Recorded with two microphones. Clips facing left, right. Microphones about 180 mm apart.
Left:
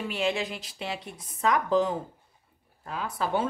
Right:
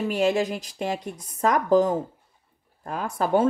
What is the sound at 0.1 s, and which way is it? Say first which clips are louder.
Speech: right 6 dB; 45° right (ahead or behind).